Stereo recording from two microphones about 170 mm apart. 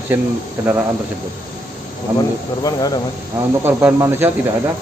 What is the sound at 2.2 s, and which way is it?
Speech, 25° left (ahead or behind).